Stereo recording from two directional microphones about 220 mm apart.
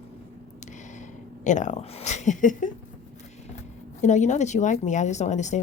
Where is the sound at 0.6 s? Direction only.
35° left (ahead or behind).